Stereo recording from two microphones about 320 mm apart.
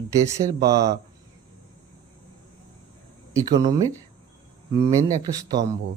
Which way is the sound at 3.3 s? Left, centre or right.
Centre.